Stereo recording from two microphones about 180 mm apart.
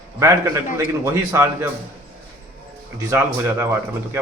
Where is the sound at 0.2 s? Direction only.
15° right (ahead or behind).